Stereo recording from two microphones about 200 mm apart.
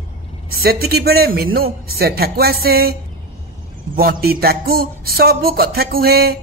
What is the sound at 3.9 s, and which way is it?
A woman's voice, 50° right (ahead or behind).